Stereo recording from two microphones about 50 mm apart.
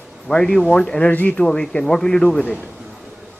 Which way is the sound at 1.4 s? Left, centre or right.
Centre.